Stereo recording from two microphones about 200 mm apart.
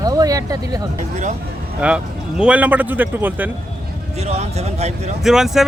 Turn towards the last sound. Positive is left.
turn(degrees=0)  # may be behind; listen again after turning